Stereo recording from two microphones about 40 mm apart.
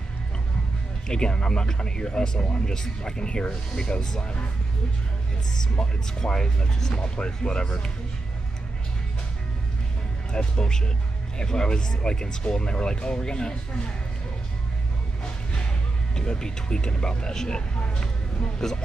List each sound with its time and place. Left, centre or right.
1.0 s speech: left
5.6 s speech: centre
10.3 s speech: left
16.2 s speech: centre